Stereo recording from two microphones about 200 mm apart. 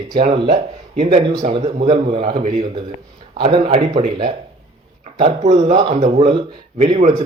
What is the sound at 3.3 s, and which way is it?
Speech, 25° right (ahead or behind).